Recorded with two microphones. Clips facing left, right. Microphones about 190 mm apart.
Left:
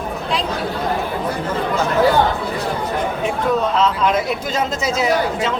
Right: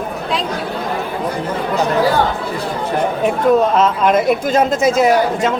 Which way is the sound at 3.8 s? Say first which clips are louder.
Right 4 dB; 50° right (ahead or behind).